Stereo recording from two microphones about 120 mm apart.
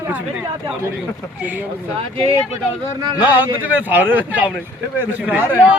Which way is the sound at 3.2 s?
15° right (ahead or behind).